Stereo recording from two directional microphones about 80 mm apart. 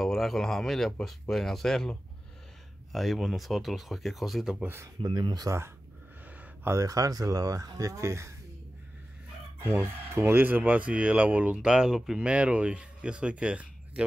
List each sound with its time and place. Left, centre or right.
0.0 s speech: centre
5.0 s speech: right
6.7 s speech: right
9.7 s speech: right; by 14.0 s centre